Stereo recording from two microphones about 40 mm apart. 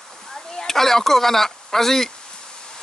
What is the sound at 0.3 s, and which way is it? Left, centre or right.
Speech, centre.